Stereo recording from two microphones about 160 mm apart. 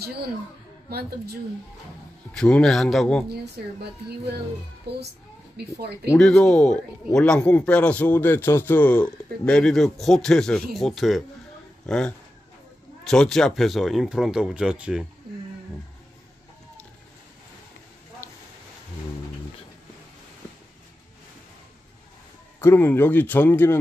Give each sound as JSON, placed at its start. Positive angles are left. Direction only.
{"t": 0.8, "sound": "a woman's voice", "side_deg": -75}
{"t": 2.3, "sound": "speech", "side_deg": 5}
{"t": 3.3, "sound": "a woman's voice", "side_deg": -90}
{"t": 5.6, "sound": "a woman's voice", "side_deg": -90}
{"t": 6.1, "sound": "a man's voice", "side_deg": 5}
{"t": 22.6, "sound": "a man's voice", "side_deg": 15}